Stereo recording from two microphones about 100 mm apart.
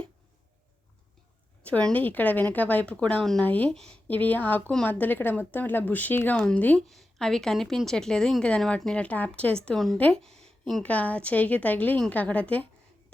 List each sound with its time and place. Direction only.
1.6 s speech: 15° left (ahead or behind)
6.8 s a woman's voice: centre (ahead or behind)